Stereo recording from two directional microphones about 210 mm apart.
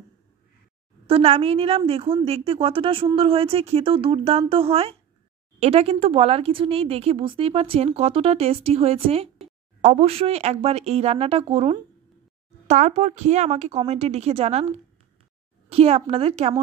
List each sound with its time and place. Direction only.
1.0 s a woman's voice: 30° right (ahead or behind)